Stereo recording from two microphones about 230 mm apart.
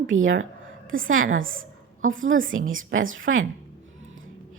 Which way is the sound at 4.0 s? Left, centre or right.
Right.